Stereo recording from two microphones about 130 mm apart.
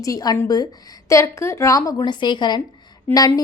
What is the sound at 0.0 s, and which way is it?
A woman's voice, 30° left (ahead or behind).